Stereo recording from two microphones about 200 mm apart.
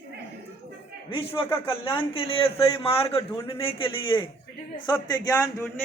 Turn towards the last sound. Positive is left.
turn(degrees=15)  # may be behind; listen again after turning